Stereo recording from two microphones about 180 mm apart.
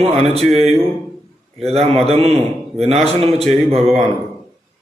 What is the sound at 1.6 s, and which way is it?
Speech, 35° right (ahead or behind).